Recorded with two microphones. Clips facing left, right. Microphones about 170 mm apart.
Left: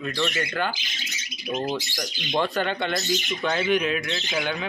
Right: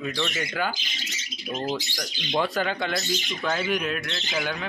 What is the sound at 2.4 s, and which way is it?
Speech, 5° right (ahead or behind).